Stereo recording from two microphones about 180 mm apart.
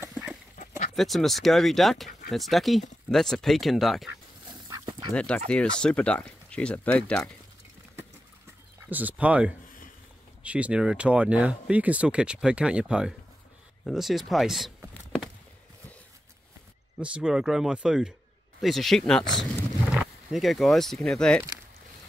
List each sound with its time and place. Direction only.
0.1 s a sound: centre (ahead or behind)
0.9 s speech: centre (ahead or behind)
4.6 s dog: 20° right (ahead or behind)
5.1 s speech: 5° left (ahead or behind)
8.8 s speech: 10° right (ahead or behind)
17.0 s speech: 5° right (ahead or behind)